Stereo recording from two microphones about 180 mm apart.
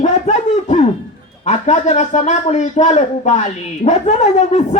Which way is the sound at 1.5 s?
40° left (ahead or behind).